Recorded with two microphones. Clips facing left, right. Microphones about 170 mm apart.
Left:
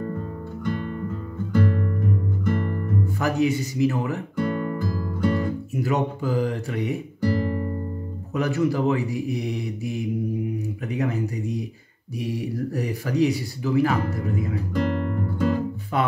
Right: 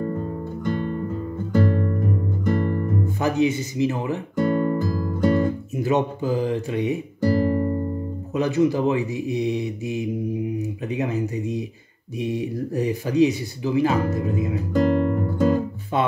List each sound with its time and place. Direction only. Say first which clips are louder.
0.7 s music: right 3 dB; 35° right (ahead or behind)
3.2 s speech: right 1 dB; 20° right (ahead or behind)
4.4 s music: right 6 dB; 40° right (ahead or behind)
5.8 s speech: right 3 dB; 20° right (ahead or behind)
7.2 s guitar: right 5 dB; 40° right (ahead or behind)
8.4 s speech: right 3 dB; 20° right (ahead or behind)
14.7 s music: right 7 dB; 40° right (ahead or behind)
15.9 s speech: right 2 dB; 25° right (ahead or behind)